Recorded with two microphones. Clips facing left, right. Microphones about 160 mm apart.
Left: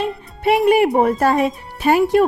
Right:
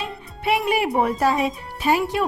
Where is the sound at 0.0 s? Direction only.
45° left (ahead or behind).